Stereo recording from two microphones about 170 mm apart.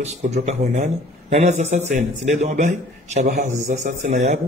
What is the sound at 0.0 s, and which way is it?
A man's voice, 40° right (ahead or behind).